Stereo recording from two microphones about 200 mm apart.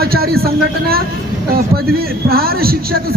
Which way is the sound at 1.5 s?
50° right (ahead or behind).